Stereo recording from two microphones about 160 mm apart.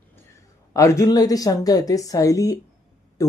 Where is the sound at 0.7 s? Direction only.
20° left (ahead or behind).